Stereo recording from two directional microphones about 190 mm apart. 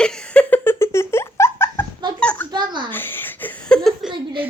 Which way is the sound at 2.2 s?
5° left (ahead or behind).